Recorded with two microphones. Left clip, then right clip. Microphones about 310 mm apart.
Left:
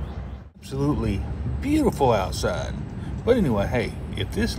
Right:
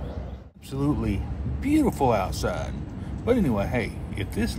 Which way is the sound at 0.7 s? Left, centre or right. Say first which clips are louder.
Left 2 dB; centre.